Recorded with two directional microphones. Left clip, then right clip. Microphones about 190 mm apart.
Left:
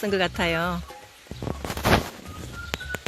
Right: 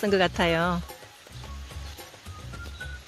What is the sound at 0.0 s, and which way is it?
Speech, 5° right (ahead or behind).